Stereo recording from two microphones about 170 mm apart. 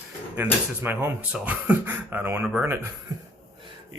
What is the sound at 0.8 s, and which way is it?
Speech, 15° right (ahead or behind).